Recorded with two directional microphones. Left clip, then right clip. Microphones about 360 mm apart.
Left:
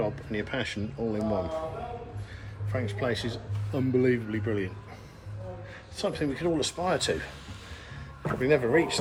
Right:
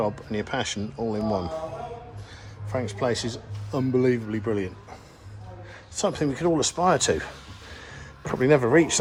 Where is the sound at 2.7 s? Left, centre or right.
Centre.